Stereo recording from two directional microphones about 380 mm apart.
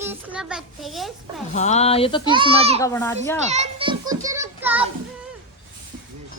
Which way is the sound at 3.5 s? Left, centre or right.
Centre.